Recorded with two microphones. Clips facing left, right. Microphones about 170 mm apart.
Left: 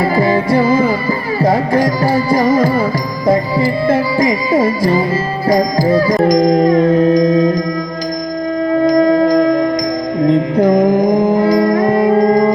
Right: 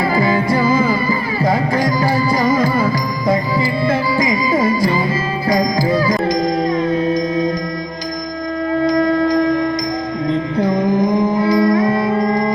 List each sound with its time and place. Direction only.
0.0 s music: 30° left (ahead or behind); by 7.3 s 45° left (ahead or behind)
8.8 s music: 45° left (ahead or behind)